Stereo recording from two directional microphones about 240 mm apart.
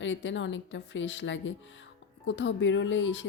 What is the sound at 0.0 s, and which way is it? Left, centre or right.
A woman's voice, left.